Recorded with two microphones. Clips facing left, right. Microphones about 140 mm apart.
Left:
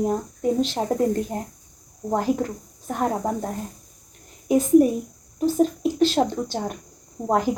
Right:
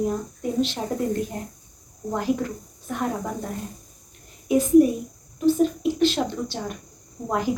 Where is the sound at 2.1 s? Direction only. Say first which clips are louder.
Left 2 dB; 40° left (ahead or behind).